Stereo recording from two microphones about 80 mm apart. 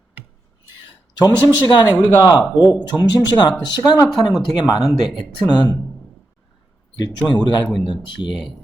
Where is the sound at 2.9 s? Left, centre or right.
Left.